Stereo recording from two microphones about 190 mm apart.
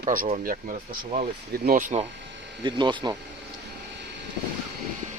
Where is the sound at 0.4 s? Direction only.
40° right (ahead or behind).